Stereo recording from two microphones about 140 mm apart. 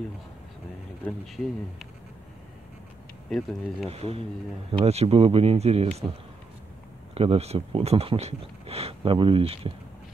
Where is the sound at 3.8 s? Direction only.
45° right (ahead or behind).